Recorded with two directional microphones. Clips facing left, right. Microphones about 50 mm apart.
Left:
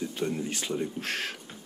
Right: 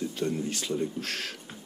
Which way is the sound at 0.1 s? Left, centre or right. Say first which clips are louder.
Right 1 dB; left.